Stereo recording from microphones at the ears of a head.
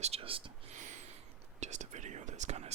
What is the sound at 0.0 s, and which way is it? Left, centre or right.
Whispering, right.